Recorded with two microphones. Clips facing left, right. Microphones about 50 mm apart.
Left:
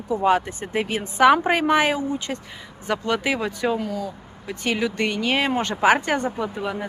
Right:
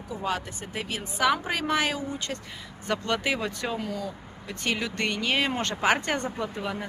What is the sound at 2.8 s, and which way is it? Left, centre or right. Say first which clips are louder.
Speech: left 4 dB; centre.